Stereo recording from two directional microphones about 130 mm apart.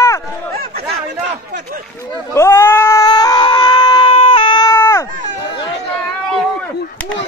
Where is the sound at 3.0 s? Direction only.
30° left (ahead or behind).